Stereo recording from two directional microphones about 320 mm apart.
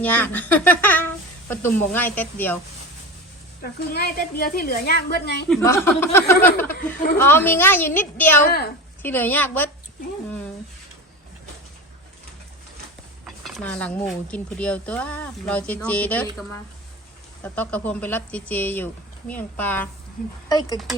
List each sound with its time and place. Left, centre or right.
0.0 s speech: centre
3.6 s a woman's voice: left
5.5 s a woman's voice: centre
8.4 s a woman's voice: left
9.0 s speech: centre
13.2 s a woman's voice: centre